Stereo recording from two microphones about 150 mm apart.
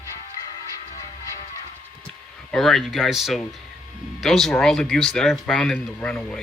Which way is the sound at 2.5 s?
Centre (ahead or behind).